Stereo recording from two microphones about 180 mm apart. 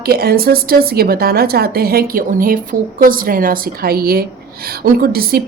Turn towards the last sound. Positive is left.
turn(degrees=-55)  # may be behind; listen again after turning